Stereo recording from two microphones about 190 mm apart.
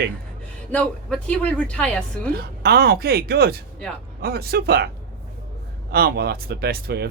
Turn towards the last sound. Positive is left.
turn(degrees=-60)  # may be behind; listen again after turning